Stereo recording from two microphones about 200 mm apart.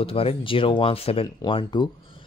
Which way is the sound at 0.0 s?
30° left (ahead or behind).